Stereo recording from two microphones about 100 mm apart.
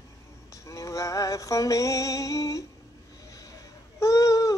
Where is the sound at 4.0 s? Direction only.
35° left (ahead or behind).